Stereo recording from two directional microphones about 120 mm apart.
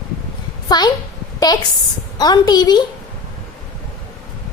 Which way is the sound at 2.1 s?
35° left (ahead or behind).